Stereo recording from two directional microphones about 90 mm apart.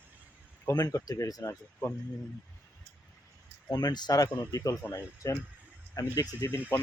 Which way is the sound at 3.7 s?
45° left (ahead or behind).